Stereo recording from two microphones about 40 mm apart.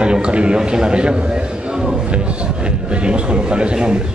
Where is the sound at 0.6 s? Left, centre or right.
Centre.